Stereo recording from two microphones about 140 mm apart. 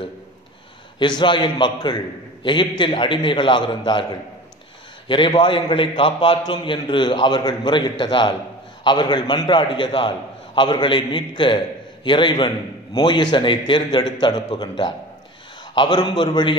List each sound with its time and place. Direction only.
0.9 s a man's voice: 35° left (ahead or behind)